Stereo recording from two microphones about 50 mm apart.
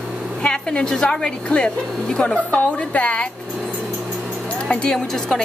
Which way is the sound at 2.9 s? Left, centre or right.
Left.